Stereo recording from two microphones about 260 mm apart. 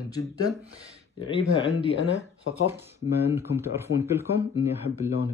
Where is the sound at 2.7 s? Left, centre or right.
Centre.